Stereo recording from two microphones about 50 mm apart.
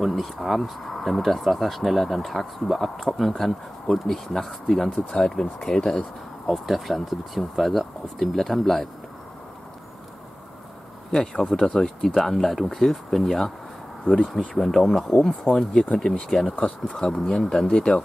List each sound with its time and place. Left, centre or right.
0.0 s speech: centre
5.9 s speech: centre
11.5 s speech: centre
14.5 s speech: centre